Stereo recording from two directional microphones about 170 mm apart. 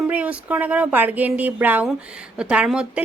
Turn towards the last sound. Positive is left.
turn(degrees=-5)  # may be behind; listen again after turning